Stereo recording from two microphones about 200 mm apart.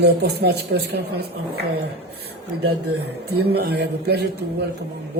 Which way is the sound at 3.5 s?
55° right (ahead or behind).